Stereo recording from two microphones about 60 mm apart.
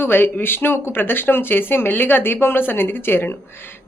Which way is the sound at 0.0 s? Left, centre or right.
Left.